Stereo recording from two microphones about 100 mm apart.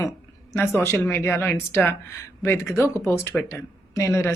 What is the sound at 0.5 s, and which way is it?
Speech, 25° left (ahead or behind).